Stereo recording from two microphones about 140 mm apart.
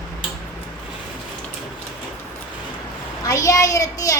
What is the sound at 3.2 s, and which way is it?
Speech, 25° left (ahead or behind).